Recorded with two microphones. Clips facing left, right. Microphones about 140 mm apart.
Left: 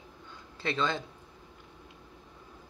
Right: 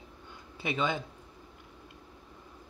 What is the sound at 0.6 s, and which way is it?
Speech, 15° right (ahead or behind).